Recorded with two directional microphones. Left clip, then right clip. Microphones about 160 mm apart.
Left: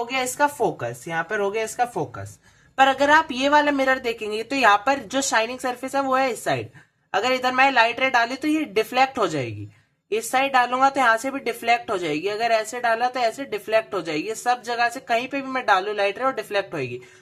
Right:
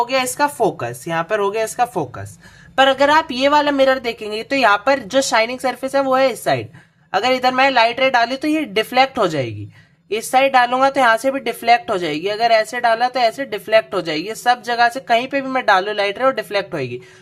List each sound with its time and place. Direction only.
0.1 s a woman's voice: 40° right (ahead or behind)
2.7 s a woman's voice: 20° right (ahead or behind)